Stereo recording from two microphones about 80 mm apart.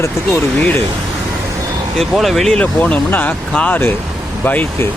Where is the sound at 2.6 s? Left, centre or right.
Centre.